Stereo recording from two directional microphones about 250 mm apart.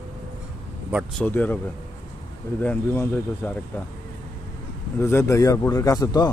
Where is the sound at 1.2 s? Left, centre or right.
Centre.